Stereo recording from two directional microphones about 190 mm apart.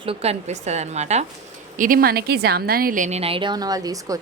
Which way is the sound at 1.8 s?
50° right (ahead or behind).